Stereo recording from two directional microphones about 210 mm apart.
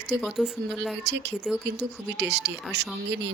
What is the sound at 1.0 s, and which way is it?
Speech, 55° right (ahead or behind).